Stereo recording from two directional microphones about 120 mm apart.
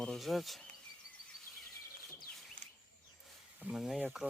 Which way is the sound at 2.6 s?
90° right.